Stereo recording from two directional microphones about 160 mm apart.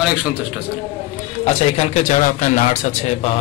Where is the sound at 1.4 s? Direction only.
45° left (ahead or behind).